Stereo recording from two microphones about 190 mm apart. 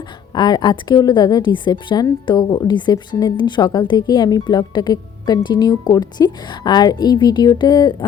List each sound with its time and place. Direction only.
0.3 s a woman's voice: 20° left (ahead or behind)